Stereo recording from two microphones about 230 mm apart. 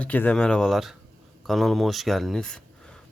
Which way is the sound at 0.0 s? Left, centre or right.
Centre.